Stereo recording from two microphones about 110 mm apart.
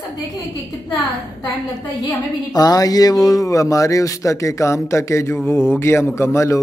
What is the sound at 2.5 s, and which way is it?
Speech, 35° left (ahead or behind).